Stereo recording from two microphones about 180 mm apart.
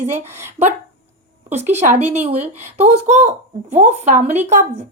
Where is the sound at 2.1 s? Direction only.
35° right (ahead or behind).